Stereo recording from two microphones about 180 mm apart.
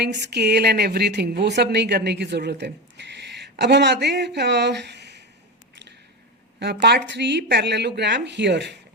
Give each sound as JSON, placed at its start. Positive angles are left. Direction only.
{"t": 0.0, "sound": "a woman's voice", "side_deg": -70}
{"t": 6.6, "sound": "a woman's voice", "side_deg": -70}